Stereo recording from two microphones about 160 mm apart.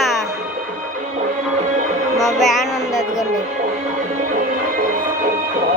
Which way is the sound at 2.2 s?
Centre (ahead or behind).